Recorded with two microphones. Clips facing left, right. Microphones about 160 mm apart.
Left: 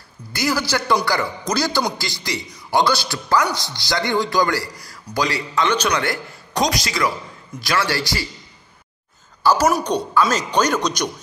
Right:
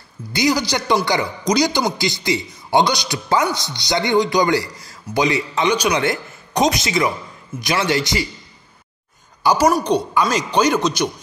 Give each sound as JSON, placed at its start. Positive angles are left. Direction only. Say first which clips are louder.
{"t": 0.3, "sound": "a man's voice", "louder": "right 3 dB", "side_deg": -20}
{"t": 9.4, "sound": "a woman's voice", "louder": "right 1 dB", "side_deg": -15}